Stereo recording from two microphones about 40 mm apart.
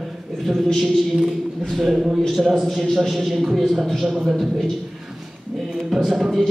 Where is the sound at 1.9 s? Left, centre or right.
Centre.